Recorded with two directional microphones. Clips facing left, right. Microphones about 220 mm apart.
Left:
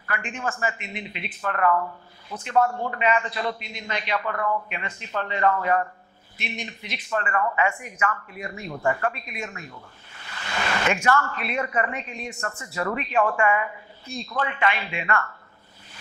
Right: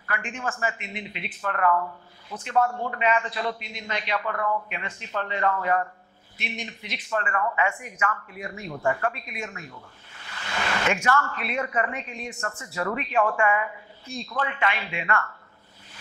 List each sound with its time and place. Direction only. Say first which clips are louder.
0.0 s a man's voice: left 1 dB; 15° left (ahead or behind)